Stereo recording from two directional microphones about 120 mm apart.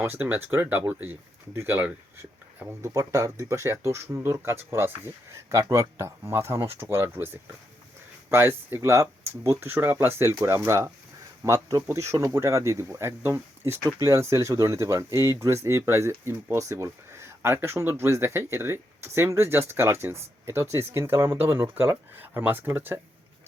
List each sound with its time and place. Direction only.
0.0 s speech: 15° right (ahead or behind)